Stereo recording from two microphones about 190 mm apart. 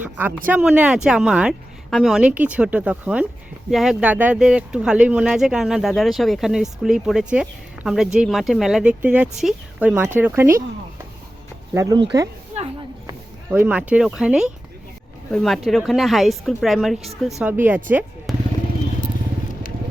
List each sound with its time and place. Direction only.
0.0 s speech: 10° right (ahead or behind)
11.7 s speech: 15° right (ahead or behind)
13.5 s speech: 10° right (ahead or behind)
18.3 s vehicle: centre (ahead or behind)